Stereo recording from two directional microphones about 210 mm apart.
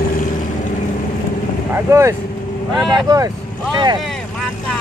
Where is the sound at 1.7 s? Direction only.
10° right (ahead or behind).